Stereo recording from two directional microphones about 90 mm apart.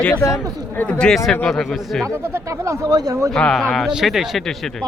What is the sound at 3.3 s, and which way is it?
Speech, 5° left (ahead or behind).